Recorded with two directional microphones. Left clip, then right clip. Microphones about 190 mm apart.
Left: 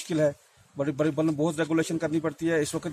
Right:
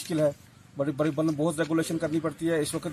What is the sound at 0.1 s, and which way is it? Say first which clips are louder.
Speech: left 1 dB; 25° left (ahead or behind).